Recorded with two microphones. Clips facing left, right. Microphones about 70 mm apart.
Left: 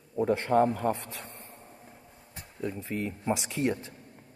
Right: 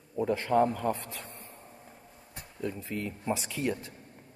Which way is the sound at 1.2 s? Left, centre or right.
Left.